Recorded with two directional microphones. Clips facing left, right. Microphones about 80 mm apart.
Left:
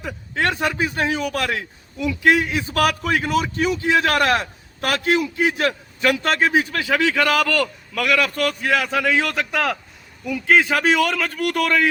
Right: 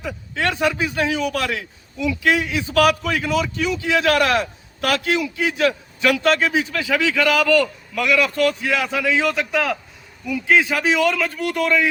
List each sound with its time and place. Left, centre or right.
0.0 s a man's voice: left